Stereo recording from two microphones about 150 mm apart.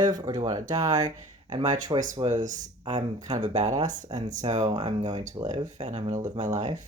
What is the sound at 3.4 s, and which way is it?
Speech, 50° right (ahead or behind).